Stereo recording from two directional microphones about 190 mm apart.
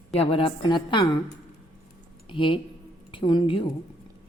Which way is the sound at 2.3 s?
25° left (ahead or behind).